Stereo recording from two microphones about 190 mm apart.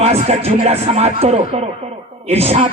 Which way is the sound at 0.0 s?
35° right (ahead or behind).